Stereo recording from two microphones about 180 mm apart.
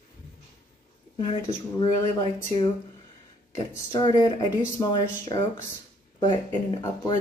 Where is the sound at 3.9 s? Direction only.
25° left (ahead or behind).